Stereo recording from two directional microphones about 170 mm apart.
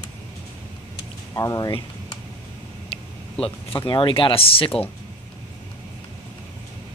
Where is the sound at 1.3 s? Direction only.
20° left (ahead or behind).